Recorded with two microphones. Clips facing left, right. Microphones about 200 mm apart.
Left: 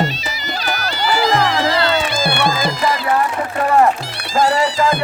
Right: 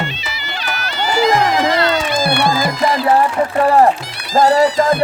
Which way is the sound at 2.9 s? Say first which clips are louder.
Right 6 dB; 30° right (ahead or behind).